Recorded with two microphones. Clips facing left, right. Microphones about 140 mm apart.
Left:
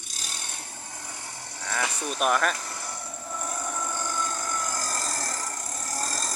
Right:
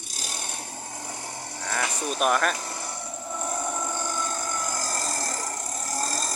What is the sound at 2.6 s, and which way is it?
Vehicle, 25° right (ahead or behind).